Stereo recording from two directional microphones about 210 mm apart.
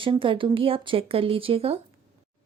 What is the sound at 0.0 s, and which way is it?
Speech, 25° right (ahead or behind).